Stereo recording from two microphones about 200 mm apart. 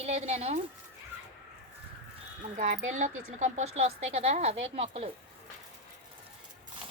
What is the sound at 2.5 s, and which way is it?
A woman's voice, 35° right (ahead or behind).